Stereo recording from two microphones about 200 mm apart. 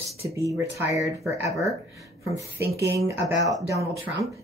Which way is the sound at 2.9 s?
15° right (ahead or behind).